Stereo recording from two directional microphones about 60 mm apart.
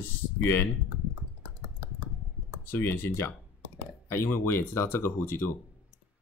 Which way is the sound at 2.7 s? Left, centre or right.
Left.